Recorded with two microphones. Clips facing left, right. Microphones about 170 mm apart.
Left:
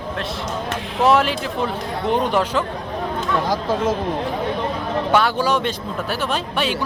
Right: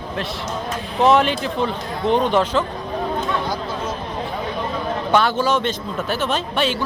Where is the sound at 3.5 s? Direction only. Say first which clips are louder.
Left 5 dB; 90° left.